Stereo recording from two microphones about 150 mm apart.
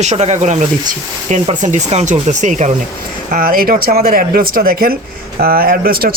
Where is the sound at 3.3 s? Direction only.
70° right (ahead or behind).